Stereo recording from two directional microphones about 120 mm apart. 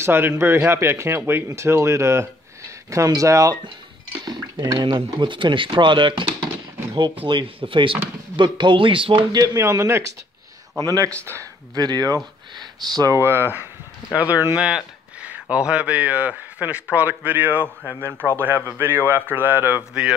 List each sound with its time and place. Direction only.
0.0 s speech: 20° right (ahead or behind); by 9.4 s 45° right (ahead or behind)
9.4 s a man's voice: 30° right (ahead or behind)